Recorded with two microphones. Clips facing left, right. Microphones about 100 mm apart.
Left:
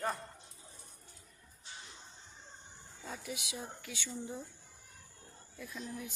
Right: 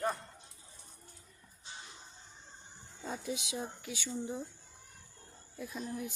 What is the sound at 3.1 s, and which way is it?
Speech, 25° right (ahead or behind).